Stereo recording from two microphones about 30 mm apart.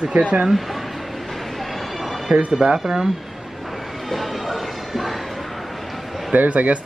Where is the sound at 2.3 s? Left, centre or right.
Right.